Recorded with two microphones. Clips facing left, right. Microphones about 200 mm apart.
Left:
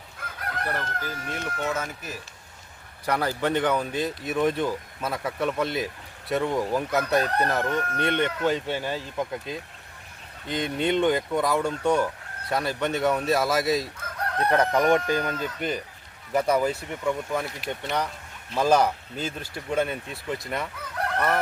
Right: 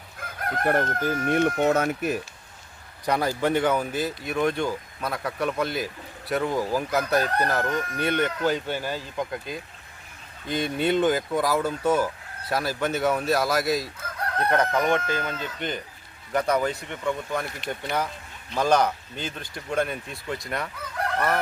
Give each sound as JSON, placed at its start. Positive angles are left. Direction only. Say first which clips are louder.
{"t": 0.5, "sound": "speech", "louder": "right 8 dB", "side_deg": -50}
{"t": 3.1, "sound": "speech", "louder": "right 2 dB", "side_deg": -10}
{"t": 14.8, "sound": "speech", "louder": "left 3 dB", "side_deg": 15}